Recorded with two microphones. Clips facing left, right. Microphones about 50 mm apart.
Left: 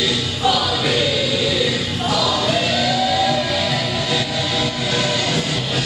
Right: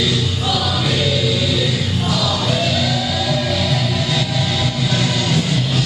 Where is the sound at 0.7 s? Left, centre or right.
Centre.